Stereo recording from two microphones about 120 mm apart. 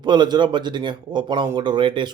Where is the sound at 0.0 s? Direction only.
40° right (ahead or behind).